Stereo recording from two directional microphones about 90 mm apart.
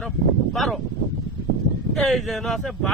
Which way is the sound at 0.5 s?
Centre (ahead or behind).